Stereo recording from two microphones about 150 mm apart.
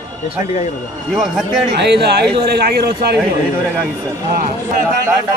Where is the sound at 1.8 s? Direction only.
90° right.